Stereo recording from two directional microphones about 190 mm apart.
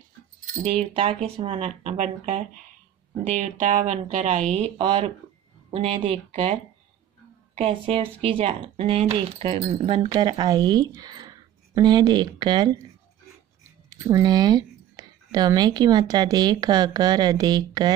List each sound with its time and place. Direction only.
0.9 s a woman's voice: 30° right (ahead or behind)
13.8 s speech: 15° right (ahead or behind)